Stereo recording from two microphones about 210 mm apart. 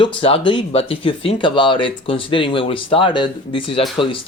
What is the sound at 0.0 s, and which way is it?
Speech, 25° left (ahead or behind).